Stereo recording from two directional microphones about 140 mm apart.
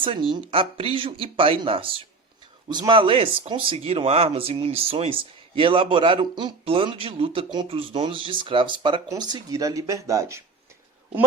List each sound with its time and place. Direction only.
0.0 s speech: 35° right (ahead or behind); by 10.4 s 20° right (ahead or behind)